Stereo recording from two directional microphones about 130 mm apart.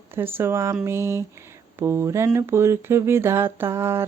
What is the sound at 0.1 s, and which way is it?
Speech, 15° right (ahead or behind).